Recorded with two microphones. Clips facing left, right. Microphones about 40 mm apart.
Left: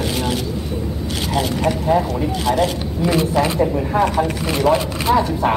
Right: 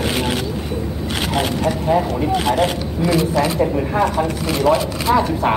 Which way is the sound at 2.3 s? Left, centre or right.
Right.